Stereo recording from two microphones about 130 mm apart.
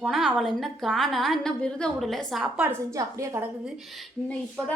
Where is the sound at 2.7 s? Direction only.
25° right (ahead or behind).